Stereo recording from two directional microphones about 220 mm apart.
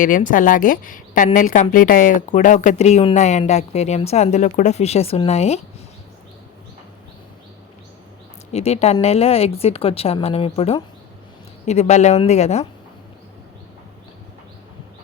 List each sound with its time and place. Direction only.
0.0 s speech: 35° left (ahead or behind)
8.5 s speech: 30° left (ahead or behind)